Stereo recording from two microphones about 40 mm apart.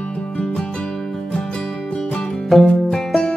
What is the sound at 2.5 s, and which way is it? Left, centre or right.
Music, centre.